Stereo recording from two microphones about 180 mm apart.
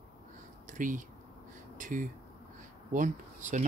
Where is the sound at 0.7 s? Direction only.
45° right (ahead or behind).